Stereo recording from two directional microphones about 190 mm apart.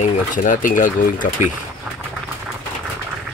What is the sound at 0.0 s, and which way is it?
Speech, 45° left (ahead or behind).